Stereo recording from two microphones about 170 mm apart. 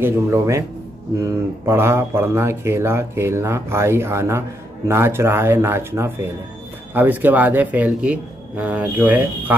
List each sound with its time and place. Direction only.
0.0 s speech: 15° right (ahead or behind)